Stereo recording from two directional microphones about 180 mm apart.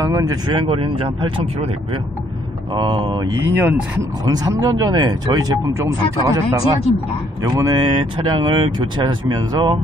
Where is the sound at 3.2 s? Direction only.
80° right.